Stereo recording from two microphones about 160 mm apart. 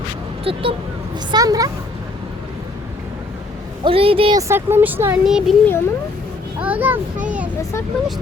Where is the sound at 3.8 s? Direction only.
35° right (ahead or behind).